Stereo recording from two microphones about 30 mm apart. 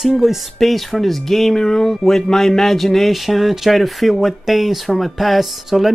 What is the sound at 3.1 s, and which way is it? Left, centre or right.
Speech, centre.